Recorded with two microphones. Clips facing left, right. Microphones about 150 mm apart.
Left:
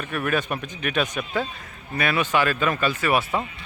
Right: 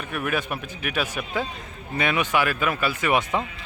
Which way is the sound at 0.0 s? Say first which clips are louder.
Left 2 dB; 15° right (ahead or behind).